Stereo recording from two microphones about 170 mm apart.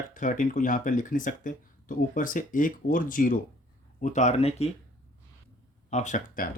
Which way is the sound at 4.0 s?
45° left (ahead or behind).